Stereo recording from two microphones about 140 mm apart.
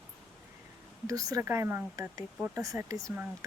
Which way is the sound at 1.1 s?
25° right (ahead or behind).